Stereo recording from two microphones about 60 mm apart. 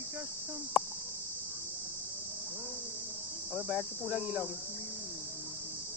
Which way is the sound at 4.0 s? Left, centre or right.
Centre.